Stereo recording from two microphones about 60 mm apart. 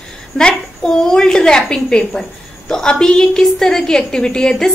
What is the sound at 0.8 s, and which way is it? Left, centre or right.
A woman's voice, centre.